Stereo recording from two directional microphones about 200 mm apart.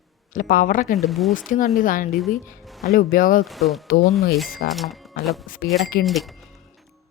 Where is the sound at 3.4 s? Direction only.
Centre (ahead or behind).